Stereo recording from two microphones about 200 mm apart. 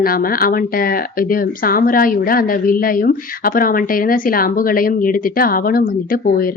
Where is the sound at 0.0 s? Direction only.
45° left (ahead or behind).